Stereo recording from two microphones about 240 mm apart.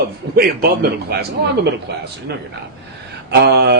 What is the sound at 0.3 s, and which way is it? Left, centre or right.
A man's voice, right.